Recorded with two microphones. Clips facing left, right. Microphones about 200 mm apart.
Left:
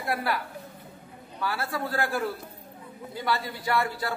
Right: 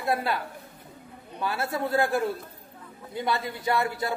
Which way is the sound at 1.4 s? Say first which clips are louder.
Right 2 dB; 20° right (ahead or behind).